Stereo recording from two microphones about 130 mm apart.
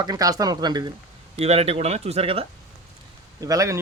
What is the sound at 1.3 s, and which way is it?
Speech, 55° right (ahead or behind).